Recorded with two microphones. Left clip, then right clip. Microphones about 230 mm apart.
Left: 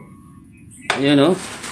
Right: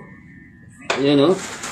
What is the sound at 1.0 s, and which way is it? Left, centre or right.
Speech, left.